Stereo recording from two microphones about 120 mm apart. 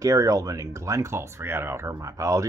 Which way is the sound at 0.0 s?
30° right (ahead or behind).